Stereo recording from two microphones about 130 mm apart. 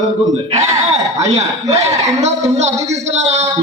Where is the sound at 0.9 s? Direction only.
60° right (ahead or behind).